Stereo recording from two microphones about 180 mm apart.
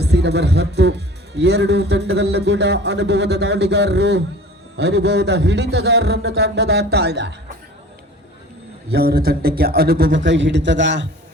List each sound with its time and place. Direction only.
0.0 s a man's voice: 65° right (ahead or behind)
8.9 s a man's voice: 60° right (ahead or behind); by 11.1 s 80° right